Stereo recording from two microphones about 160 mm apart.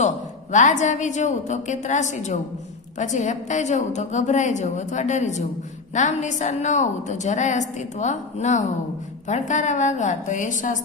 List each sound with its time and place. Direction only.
0.5 s a woman's voice: 50° left (ahead or behind)